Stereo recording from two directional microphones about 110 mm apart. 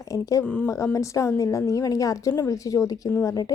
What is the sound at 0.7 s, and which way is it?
A woman's voice, 30° left (ahead or behind).